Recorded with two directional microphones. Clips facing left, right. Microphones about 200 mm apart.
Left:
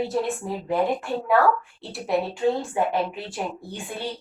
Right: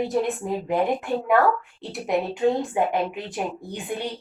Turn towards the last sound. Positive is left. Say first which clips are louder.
# right 3 dB
turn(degrees=-20)  # may be behind; listen again after turning